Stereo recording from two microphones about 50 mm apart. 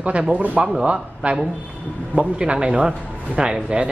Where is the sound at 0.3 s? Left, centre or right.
Right.